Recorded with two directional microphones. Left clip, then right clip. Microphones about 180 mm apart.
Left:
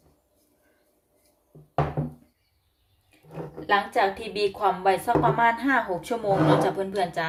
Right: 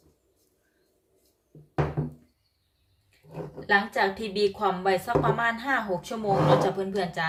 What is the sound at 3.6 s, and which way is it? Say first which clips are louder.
A woman's voice: left 1 dB; 20° left (ahead or behind).